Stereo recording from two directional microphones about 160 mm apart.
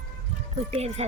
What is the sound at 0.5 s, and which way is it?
Speech, 40° right (ahead or behind).